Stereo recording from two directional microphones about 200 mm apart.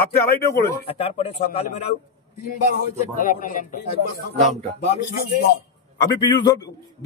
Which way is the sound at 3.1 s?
45° left (ahead or behind).